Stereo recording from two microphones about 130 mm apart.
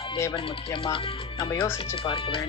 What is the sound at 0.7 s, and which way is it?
Speech, 45° left (ahead or behind).